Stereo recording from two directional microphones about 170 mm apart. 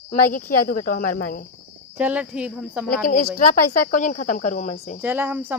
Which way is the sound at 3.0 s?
70° left (ahead or behind).